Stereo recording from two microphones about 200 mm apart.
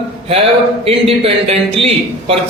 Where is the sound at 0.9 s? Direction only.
30° right (ahead or behind).